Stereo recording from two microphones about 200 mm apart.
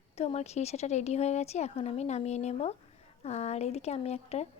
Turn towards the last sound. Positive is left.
turn(degrees=30)  # may be behind; listen again after turning